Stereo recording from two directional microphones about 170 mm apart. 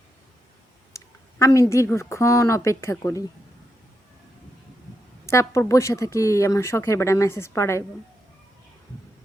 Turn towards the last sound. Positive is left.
turn(degrees=15)  # may be behind; listen again after turning